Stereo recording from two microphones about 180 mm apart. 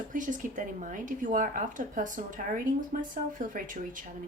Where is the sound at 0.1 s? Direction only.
45° right (ahead or behind).